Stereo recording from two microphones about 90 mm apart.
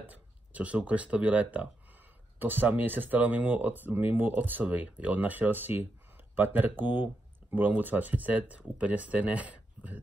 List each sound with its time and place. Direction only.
0.0 s speech: 15° right (ahead or behind)